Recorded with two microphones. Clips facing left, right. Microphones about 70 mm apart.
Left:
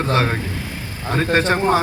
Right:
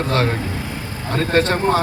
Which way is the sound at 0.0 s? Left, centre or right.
Centre.